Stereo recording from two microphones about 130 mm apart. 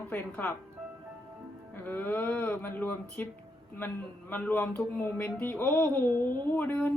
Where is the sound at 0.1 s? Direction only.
10° left (ahead or behind).